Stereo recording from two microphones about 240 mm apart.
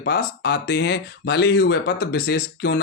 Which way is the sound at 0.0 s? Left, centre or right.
Left.